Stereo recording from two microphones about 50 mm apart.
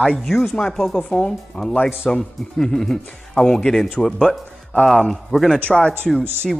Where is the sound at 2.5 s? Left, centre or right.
Centre.